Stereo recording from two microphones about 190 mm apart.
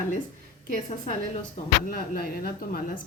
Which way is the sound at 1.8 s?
45° left (ahead or behind).